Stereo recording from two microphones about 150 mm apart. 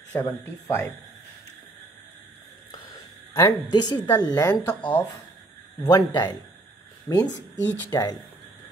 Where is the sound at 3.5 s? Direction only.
30° left (ahead or behind).